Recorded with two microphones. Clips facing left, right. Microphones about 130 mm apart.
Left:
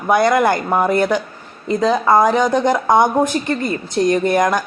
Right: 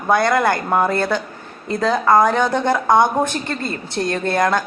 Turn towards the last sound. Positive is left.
turn(degrees=15)  # may be behind; listen again after turning